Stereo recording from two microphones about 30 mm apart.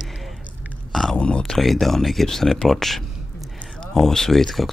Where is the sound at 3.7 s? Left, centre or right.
Centre.